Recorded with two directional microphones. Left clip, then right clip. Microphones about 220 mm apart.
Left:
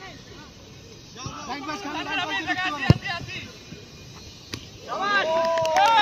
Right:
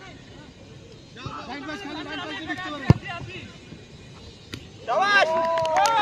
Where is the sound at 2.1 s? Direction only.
50° left (ahead or behind).